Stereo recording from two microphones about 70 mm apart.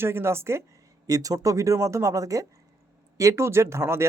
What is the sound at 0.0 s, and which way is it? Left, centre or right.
Speech, right.